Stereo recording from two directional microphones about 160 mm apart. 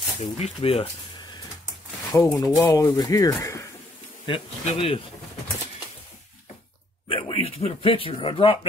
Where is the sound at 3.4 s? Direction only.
20° left (ahead or behind).